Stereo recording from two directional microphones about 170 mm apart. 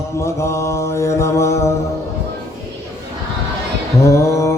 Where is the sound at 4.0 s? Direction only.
15° left (ahead or behind).